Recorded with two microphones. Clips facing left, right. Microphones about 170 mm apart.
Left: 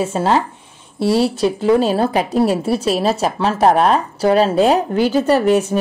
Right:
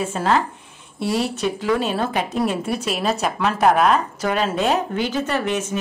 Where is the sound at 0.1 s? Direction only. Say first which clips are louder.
Left 3 dB; 30° left (ahead or behind).